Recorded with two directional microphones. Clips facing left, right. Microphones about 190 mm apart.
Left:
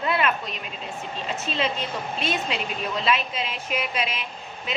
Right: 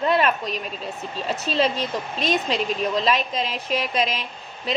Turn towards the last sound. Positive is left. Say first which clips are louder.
# right 3 dB
turn(degrees=-35)  # may be behind; listen again after turning